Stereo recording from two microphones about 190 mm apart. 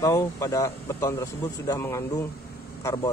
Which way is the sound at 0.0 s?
15° left (ahead or behind).